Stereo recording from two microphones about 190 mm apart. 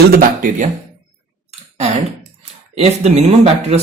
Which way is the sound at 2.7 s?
35° right (ahead or behind).